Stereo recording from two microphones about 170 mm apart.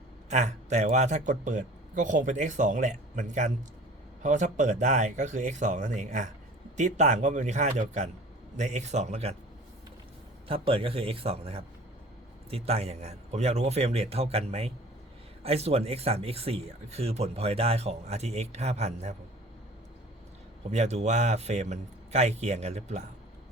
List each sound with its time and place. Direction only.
0.3 s a man's voice: 45° right (ahead or behind)
10.5 s speech: 35° right (ahead or behind)
20.7 s speech: 40° right (ahead or behind)